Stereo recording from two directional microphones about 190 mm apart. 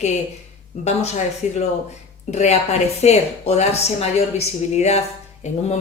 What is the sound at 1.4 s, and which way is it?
Speech, 40° left (ahead or behind).